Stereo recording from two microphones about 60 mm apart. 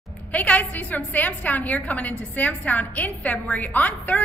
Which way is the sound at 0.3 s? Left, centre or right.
Left.